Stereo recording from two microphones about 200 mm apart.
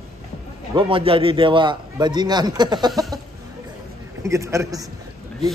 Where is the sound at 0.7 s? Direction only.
25° right (ahead or behind).